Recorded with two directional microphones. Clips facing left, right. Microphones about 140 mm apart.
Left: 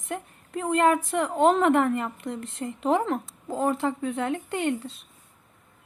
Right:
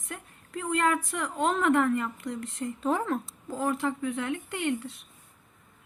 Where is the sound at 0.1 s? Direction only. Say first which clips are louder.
Left 6 dB; 25° left (ahead or behind).